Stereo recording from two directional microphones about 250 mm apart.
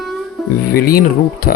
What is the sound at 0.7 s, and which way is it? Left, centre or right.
Speech, left.